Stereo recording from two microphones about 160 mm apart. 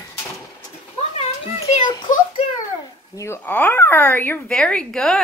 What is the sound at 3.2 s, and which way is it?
Speech, 15° left (ahead or behind).